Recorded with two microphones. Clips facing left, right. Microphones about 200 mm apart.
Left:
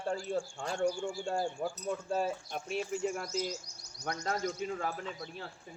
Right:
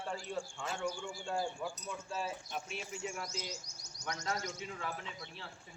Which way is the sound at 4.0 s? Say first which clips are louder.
Left 5 dB; 55° left (ahead or behind).